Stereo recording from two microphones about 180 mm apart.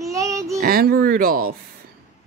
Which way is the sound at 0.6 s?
55° right (ahead or behind).